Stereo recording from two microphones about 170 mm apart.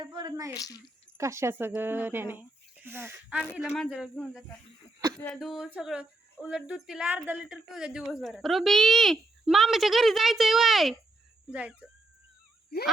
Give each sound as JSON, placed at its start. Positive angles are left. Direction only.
{"t": 0.0, "sound": "a woman's voice", "side_deg": -25}
{"t": 0.5, "sound": "a child's voice", "side_deg": 20}
{"t": 1.2, "sound": "speech", "side_deg": -15}